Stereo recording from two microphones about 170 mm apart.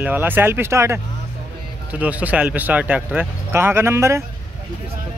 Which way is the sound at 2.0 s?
10° right (ahead or behind).